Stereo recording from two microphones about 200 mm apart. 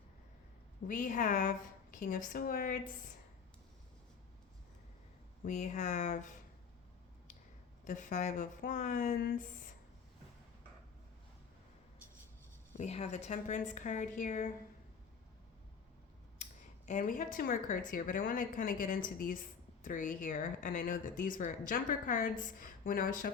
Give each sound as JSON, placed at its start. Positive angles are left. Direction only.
{"t": 0.9, "sound": "a woman's voice", "side_deg": 40}
{"t": 5.4, "sound": "a woman's voice", "side_deg": 40}
{"t": 7.9, "sound": "a woman's voice", "side_deg": 40}
{"t": 12.7, "sound": "a woman's voice", "side_deg": 30}
{"t": 16.4, "sound": "speech", "side_deg": 40}